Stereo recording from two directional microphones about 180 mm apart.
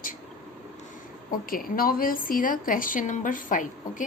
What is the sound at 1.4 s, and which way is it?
Speech, 50° left (ahead or behind).